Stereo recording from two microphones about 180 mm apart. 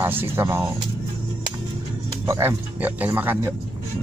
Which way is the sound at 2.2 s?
15° right (ahead or behind).